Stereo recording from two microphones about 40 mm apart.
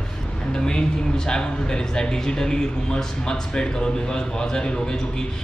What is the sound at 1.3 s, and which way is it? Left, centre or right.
A man's voice, centre.